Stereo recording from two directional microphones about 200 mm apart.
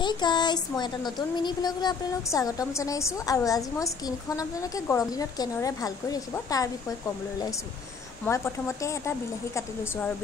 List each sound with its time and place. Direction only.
0.0 s speech: 20° left (ahead or behind)
8.3 s speech: 15° left (ahead or behind)